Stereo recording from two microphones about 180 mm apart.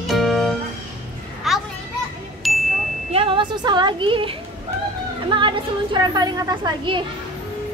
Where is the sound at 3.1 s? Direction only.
30° right (ahead or behind).